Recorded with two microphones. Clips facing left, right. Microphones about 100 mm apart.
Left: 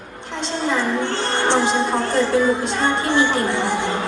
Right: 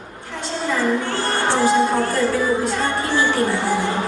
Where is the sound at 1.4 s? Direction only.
20° left (ahead or behind).